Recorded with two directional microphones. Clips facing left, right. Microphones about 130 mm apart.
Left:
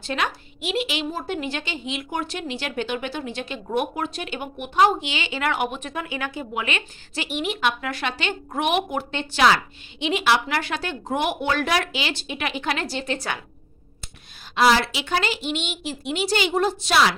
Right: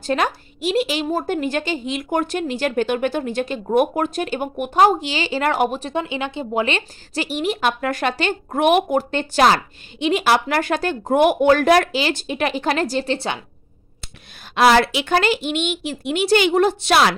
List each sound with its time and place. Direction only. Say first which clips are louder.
0.0 s speech: right 6 dB; 40° right (ahead or behind); by 6.4 s 20° right (ahead or behind)
6.5 s speech: right 7 dB; 35° right (ahead or behind)
14.5 s speech: right 4 dB; 60° right (ahead or behind)